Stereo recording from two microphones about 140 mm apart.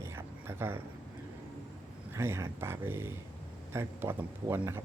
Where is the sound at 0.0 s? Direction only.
15° right (ahead or behind).